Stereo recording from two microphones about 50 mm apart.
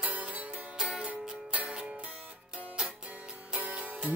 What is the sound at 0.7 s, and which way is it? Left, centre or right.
Music, centre.